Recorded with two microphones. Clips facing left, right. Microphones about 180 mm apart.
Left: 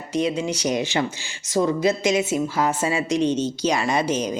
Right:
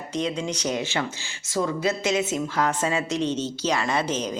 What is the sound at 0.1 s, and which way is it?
A woman's voice, 10° left (ahead or behind).